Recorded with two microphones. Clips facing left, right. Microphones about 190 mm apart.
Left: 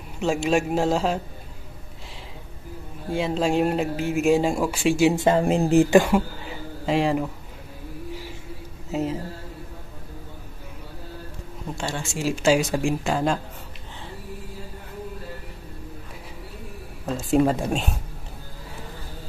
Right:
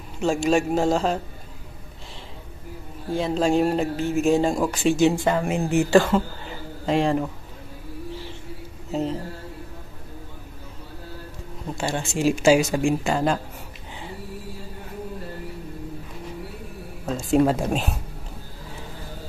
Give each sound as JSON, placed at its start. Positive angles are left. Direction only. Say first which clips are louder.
{"t": 0.2, "sound": "speech", "louder": "right 1 dB", "side_deg": 0}
{"t": 3.1, "sound": "speech", "louder": "right 2 dB", "side_deg": 0}
{"t": 5.1, "sound": "speech", "louder": "left 3 dB", "side_deg": 20}
{"t": 5.4, "sound": "speech", "louder": "left 4 dB", "side_deg": 35}
{"t": 5.9, "sound": "speech", "louder": "even", "side_deg": 15}
{"t": 8.9, "sound": "speech", "louder": "even", "side_deg": 5}
{"t": 12.2, "sound": "speech", "louder": "right 3 dB", "side_deg": -10}
{"t": 17.0, "sound": "speech", "louder": "right 1 dB", "side_deg": 0}